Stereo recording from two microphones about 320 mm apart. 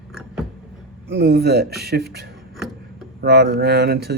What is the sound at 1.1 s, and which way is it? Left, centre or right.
Speech, right.